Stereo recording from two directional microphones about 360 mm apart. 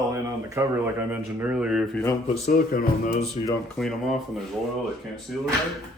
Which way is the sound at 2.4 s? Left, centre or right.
Left.